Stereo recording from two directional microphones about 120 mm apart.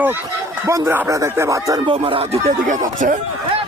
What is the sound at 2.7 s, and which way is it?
Speech, 90° right.